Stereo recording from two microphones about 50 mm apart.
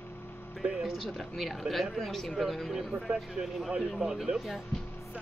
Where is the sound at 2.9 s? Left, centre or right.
Centre.